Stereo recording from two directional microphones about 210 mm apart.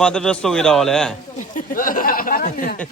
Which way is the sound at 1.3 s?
40° left (ahead or behind).